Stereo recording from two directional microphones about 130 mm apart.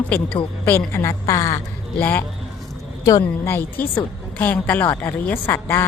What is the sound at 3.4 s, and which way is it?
A woman's voice, 20° left (ahead or behind).